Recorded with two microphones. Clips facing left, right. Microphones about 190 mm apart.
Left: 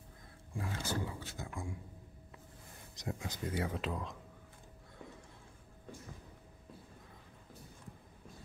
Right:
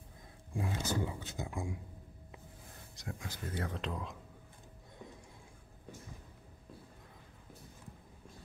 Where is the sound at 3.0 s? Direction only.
20° left (ahead or behind); by 4.2 s centre (ahead or behind).